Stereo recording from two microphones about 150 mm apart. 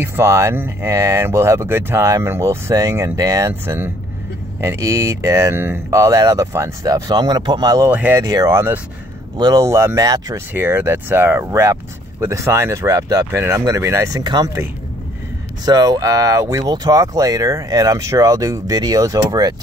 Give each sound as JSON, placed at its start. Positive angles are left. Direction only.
{"t": 0.0, "sound": "speech", "side_deg": -15}
{"t": 7.9, "sound": "speech", "side_deg": -10}
{"t": 8.2, "sound": "speech", "side_deg": -25}
{"t": 10.5, "sound": "speech", "side_deg": -15}